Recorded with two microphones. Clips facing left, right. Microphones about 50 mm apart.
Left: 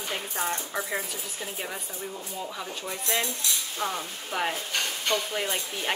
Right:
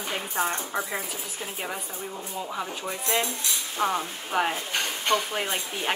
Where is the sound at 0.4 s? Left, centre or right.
Right.